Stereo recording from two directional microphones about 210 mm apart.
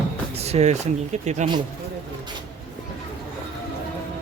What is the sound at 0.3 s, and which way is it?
Speech, 30° right (ahead or behind).